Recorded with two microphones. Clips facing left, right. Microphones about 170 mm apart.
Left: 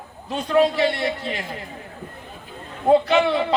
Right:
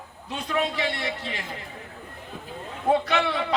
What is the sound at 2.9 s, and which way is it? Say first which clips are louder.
Speech: left 6 dB; 30° left (ahead or behind).